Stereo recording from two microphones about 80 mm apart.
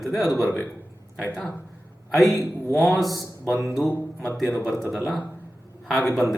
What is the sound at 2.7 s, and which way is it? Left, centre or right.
Speech, centre.